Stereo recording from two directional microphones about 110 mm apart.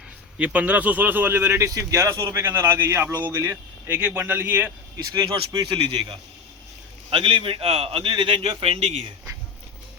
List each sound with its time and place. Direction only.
0.3 s speech: 10° right (ahead or behind)
5.1 s speech: 40° right (ahead or behind)
7.1 s a man's voice: 55° right (ahead or behind)